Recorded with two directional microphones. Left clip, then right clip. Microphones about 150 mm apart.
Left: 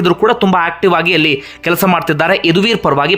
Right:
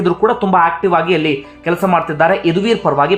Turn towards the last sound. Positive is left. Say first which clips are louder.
# left 1 dB
turn(degrees=25)  # may be behind; listen again after turning